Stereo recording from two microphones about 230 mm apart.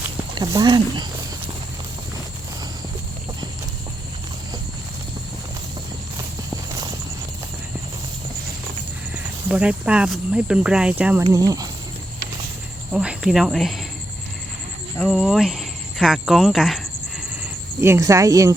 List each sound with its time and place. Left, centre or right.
0.3 s speech: centre
9.1 s speech: centre
12.9 s speech: centre
14.9 s speech: centre